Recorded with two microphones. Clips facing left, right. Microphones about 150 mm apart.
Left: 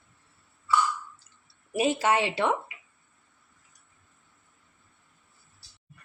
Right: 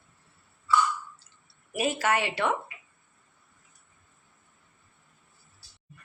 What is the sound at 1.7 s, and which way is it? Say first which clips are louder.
Speech: left 2 dB; 25° left (ahead or behind).